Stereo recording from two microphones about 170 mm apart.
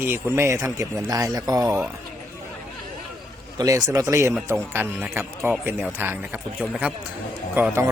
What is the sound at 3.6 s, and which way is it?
Speech, 20° right (ahead or behind).